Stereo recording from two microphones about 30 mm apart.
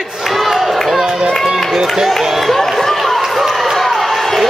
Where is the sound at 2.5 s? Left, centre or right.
Centre.